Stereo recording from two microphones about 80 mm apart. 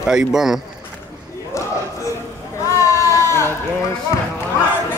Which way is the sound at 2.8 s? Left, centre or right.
Left.